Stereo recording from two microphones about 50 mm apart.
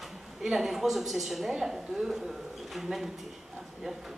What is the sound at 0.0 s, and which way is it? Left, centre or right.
A woman's voice, centre.